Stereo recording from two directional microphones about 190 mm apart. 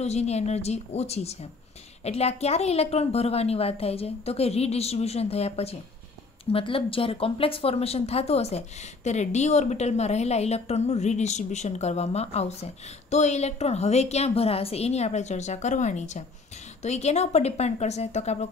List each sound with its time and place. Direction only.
0.0 s speech: 35° left (ahead or behind)